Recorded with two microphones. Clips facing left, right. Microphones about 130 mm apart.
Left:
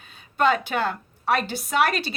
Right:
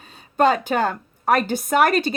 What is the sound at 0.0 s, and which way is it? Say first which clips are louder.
Speech: right 4 dB; 40° right (ahead or behind).